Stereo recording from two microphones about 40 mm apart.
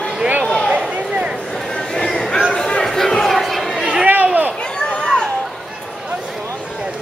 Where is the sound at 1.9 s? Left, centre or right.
Centre.